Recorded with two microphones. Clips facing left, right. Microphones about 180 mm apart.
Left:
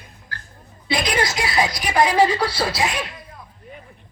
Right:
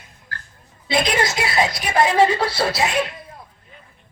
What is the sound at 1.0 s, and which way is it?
Speech, 25° right (ahead or behind).